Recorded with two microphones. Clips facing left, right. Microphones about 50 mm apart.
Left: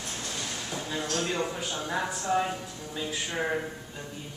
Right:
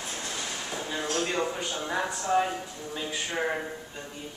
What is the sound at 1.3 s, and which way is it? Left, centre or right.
A man's voice, centre.